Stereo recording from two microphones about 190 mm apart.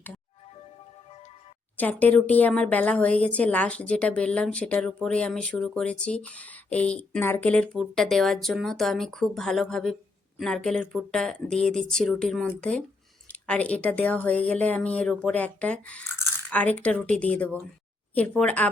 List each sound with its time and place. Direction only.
1.7 s a woman's voice: 10° left (ahead or behind)